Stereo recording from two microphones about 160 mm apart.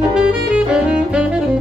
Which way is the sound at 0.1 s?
5° right (ahead or behind).